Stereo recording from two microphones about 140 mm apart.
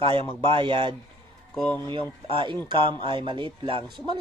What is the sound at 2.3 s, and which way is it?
Speech, 35° right (ahead or behind).